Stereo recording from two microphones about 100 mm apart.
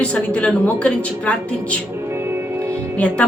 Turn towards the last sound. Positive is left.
turn(degrees=10)  # may be behind; listen again after turning